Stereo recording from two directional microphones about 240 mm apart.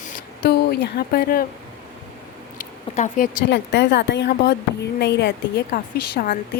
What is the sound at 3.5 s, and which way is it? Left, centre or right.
A woman's voice, left.